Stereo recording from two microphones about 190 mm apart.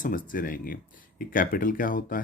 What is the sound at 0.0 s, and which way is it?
Speech, 45° left (ahead or behind).